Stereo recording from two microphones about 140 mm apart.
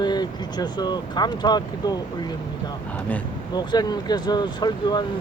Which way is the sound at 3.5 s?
30° left (ahead or behind).